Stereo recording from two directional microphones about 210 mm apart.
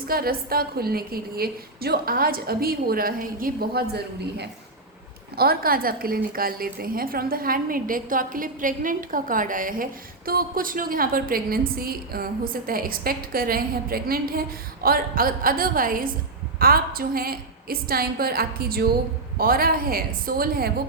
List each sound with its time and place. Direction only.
0.1 s a woman's voice: 45° right (ahead or behind)